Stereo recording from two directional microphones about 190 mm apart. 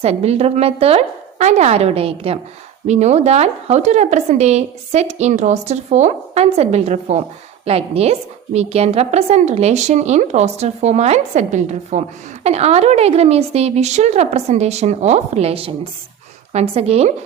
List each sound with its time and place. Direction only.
0.0 s a woman's voice: 35° right (ahead or behind)